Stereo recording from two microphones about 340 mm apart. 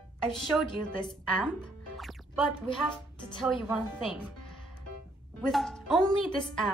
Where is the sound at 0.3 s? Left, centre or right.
Centre.